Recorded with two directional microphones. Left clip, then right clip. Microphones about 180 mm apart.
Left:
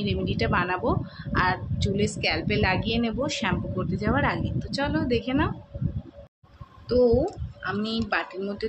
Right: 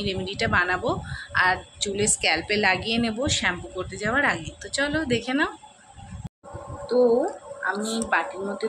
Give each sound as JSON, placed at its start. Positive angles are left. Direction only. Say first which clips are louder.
{"t": 0.0, "sound": "a woman's voice", "louder": "right 1 dB", "side_deg": 5}
{"t": 7.6, "sound": "speech", "louder": "right 2 dB", "side_deg": 15}